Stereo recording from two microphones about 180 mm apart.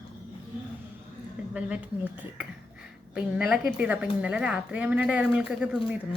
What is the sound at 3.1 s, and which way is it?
Speech, 5° right (ahead or behind).